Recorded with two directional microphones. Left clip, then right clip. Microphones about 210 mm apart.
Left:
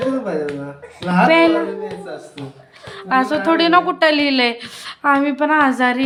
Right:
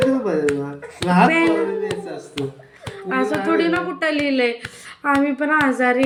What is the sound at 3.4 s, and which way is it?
Speech, 25° left (ahead or behind).